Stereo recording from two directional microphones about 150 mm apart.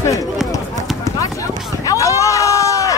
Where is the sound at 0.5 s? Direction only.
20° left (ahead or behind).